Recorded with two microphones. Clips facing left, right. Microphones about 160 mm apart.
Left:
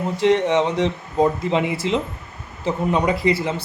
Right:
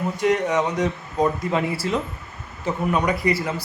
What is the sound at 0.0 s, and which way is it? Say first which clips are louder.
Speech: left 3 dB; 25° left (ahead or behind).